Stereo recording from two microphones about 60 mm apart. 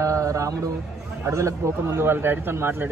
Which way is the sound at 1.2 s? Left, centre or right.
Right.